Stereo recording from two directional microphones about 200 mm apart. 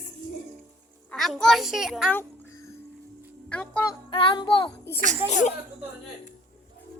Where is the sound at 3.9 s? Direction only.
25° left (ahead or behind).